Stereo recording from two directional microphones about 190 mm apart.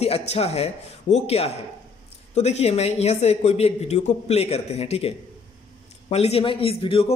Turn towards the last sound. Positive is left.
turn(degrees=30)  # may be behind; listen again after turning